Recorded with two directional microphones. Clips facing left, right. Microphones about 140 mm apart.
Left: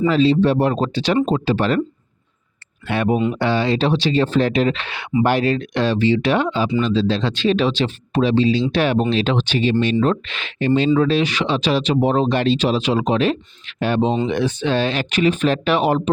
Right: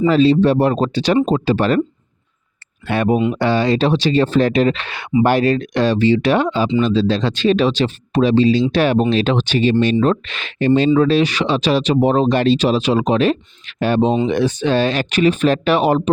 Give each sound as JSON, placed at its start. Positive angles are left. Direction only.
{"t": 0.1, "sound": "speech", "side_deg": -40}
{"t": 2.8, "sound": "speech", "side_deg": -45}